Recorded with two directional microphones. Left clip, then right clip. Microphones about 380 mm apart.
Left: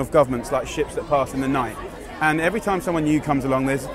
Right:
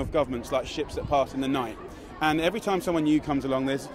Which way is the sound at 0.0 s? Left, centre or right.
Left.